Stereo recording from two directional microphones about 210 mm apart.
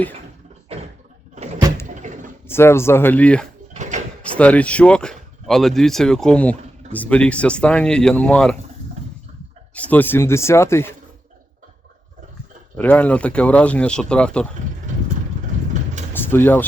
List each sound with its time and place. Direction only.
1.4 s vehicle: 35° right (ahead or behind)
2.0 s a sound: 35° right (ahead or behind)
2.5 s speech: 10° left (ahead or behind)
3.8 s drawer open or close: 35° right (ahead or behind)
4.2 s speech: 5° left (ahead or behind)
9.7 s speech: 5° left (ahead or behind)
12.7 s speech: 10° left (ahead or behind)
14.9 s vehicle: 35° right (ahead or behind)
16.1 s speech: 10° left (ahead or behind)